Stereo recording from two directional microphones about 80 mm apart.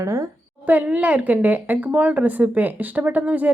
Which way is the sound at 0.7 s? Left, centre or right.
Centre.